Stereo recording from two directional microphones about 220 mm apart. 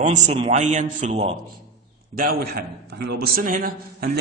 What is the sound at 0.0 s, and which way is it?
A man's voice, 30° right (ahead or behind).